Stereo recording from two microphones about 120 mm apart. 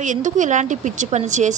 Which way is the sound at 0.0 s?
90° right.